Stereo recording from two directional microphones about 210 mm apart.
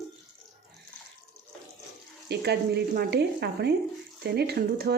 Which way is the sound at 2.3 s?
50° right (ahead or behind).